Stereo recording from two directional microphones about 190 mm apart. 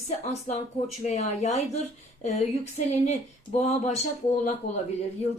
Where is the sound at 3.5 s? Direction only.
35° left (ahead or behind).